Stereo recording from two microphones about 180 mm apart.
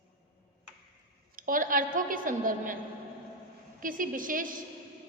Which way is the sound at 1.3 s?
50° right (ahead or behind).